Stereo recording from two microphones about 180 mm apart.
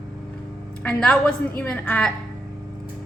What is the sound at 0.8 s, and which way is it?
A woman's voice, 5° left (ahead or behind).